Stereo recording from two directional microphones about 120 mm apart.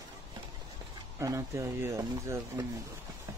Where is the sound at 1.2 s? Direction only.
25° right (ahead or behind).